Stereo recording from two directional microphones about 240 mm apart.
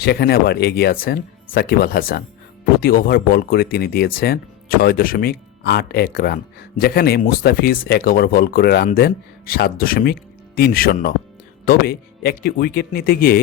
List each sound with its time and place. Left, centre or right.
0.0 s speech: left